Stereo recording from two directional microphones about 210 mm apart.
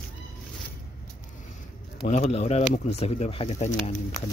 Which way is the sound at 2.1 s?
35° left (ahead or behind).